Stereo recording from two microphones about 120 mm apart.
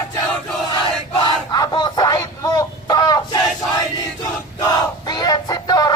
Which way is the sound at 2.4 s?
30° left (ahead or behind).